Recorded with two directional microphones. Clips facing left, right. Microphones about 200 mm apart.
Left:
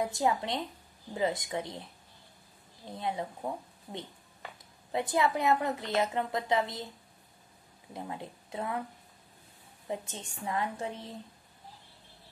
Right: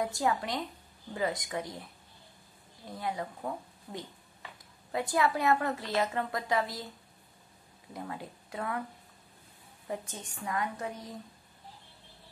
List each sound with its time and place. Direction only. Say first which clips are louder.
0.0 s a woman's voice: left 1 dB; 20° left (ahead or behind)
3.0 s a woman's voice: left 1 dB; 25° left (ahead or behind)
7.9 s a woman's voice: even; 20° left (ahead or behind)
9.8 s a woman's voice: left 1 dB; 25° left (ahead or behind)